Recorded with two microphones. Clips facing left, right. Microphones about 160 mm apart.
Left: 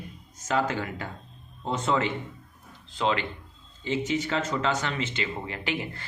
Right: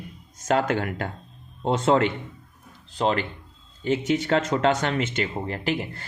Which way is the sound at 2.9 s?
40° right (ahead or behind).